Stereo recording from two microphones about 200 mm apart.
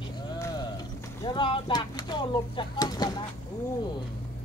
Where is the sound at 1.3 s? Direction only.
25° left (ahead or behind).